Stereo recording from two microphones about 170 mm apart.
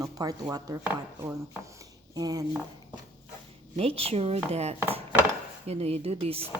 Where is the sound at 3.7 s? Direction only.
35° right (ahead or behind).